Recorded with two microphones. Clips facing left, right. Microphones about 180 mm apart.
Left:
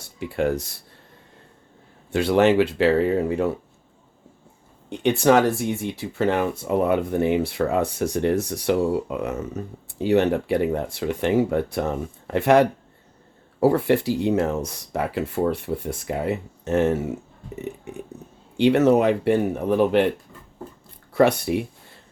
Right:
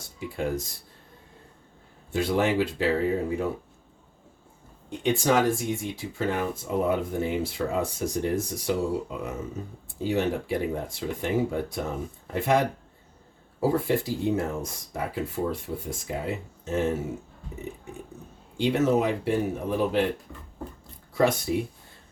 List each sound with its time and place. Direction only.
0.2 s speech: 70° left (ahead or behind)
2.1 s speech: 75° left (ahead or behind)
4.9 s speech: 65° left (ahead or behind)
18.5 s speech: 70° left (ahead or behind)
21.1 s speech: 65° left (ahead or behind)